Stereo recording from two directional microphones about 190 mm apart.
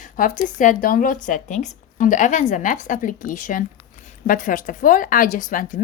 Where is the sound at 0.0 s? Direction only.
45° left (ahead or behind).